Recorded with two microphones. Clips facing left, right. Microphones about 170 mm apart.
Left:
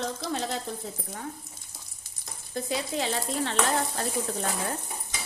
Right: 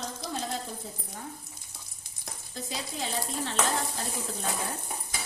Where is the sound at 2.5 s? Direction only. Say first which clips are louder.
Left 8 dB; 65° left (ahead or behind).